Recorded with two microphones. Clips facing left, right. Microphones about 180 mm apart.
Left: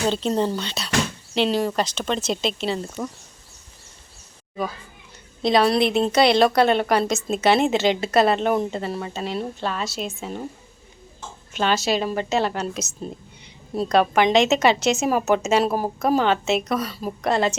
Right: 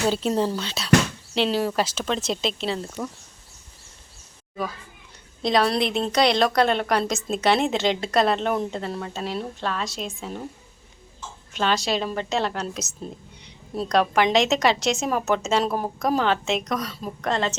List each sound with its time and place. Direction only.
0.0 s a woman's voice: 5° right (ahead or behind)
5.4 s a woman's voice: centre (ahead or behind)
11.5 s a woman's voice: 5° left (ahead or behind)